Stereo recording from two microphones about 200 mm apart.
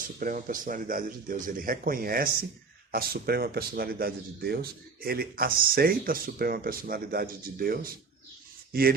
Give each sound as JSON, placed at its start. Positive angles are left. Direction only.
{"t": 0.2, "sound": "speech", "side_deg": -45}